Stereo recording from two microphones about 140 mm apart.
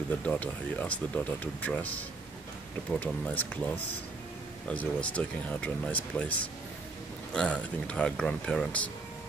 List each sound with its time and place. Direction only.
0.2 s speech: 10° left (ahead or behind)